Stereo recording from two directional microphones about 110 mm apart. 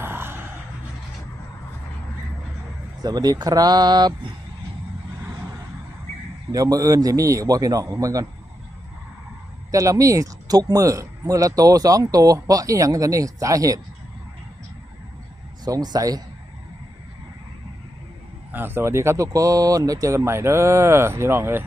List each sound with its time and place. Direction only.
0.0 s gasp: 20° right (ahead or behind)
3.0 s speech: 35° right (ahead or behind)
6.5 s speech: 35° right (ahead or behind)
9.7 s speech: 30° right (ahead or behind)
15.6 s speech: 40° right (ahead or behind)
18.5 s speech: 20° right (ahead or behind)